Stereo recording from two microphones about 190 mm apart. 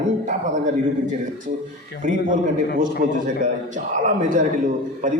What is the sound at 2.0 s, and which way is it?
Speech, 45° right (ahead or behind).